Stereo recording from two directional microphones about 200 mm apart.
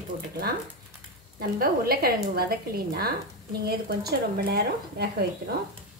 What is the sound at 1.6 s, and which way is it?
Speech, 50° right (ahead or behind).